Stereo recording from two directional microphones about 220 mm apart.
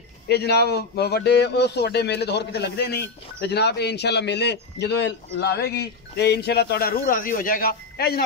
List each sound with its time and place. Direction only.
0.3 s a man's voice: 45° left (ahead or behind)